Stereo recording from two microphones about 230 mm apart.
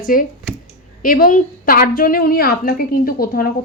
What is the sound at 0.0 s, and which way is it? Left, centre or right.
A woman's voice, left.